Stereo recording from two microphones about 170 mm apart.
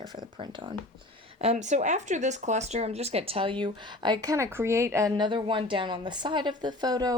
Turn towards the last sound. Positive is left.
turn(degrees=-25)  # may be behind; listen again after turning